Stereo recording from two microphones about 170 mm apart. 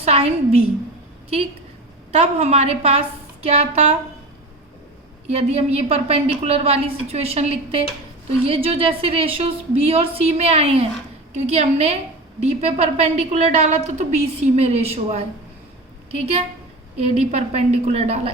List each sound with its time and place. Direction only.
0.0 s a sound: 35° right (ahead or behind)
2.1 s a woman's voice: 40° right (ahead or behind)
5.3 s a woman's voice: 40° right (ahead or behind)
17.0 s a woman's voice: 40° right (ahead or behind)